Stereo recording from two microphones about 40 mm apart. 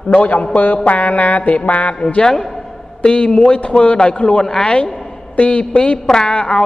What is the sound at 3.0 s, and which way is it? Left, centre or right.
A man's voice, left.